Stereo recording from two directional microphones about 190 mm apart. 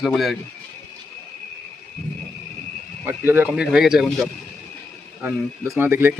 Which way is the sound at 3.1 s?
10° right (ahead or behind).